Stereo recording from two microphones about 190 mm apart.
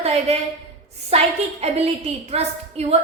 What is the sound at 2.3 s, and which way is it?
Speech, 35° right (ahead or behind).